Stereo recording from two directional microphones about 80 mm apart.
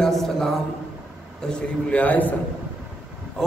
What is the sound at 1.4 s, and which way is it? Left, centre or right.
Speech, centre.